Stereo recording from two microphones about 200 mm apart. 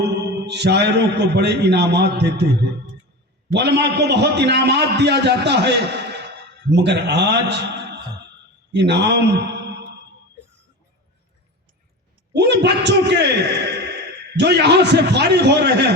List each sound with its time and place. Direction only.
0.4 s a man's voice: 60° right (ahead or behind)
3.5 s a man's voice: 60° right (ahead or behind)
8.7 s speech: 60° right (ahead or behind)
12.3 s a man's voice: 60° right (ahead or behind)